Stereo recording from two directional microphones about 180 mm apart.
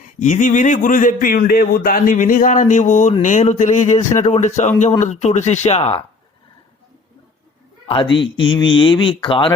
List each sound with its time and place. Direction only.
0.2 s a man's voice: 45° left (ahead or behind)
7.9 s speech: 25° left (ahead or behind)